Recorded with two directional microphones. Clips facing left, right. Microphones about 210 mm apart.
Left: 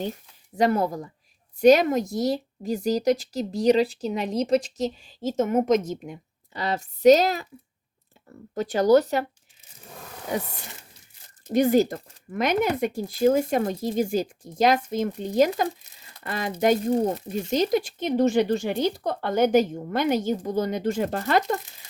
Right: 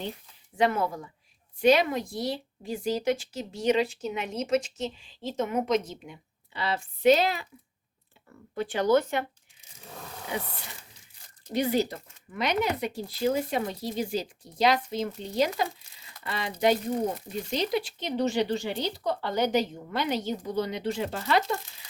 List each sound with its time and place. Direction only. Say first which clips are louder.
0.5 s a woman's voice: left 4 dB; 40° left (ahead or behind)
11.4 s speech: left 7 dB; 45° left (ahead or behind)